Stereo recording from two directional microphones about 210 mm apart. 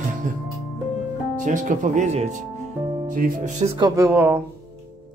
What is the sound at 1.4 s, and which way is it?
Speech, 35° right (ahead or behind).